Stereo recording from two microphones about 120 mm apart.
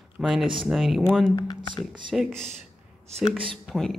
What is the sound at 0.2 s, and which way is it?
Speech, 5° right (ahead or behind).